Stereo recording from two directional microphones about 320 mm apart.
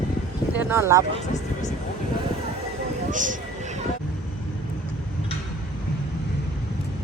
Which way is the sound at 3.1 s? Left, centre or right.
Right.